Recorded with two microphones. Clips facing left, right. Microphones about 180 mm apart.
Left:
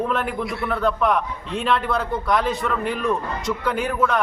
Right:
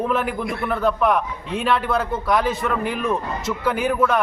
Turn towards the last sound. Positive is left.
turn(degrees=-5)  # may be behind; listen again after turning